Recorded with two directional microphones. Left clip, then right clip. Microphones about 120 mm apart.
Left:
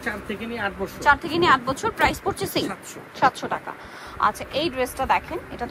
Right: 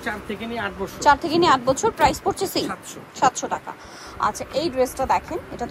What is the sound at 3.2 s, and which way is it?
A woman's voice, 30° right (ahead or behind).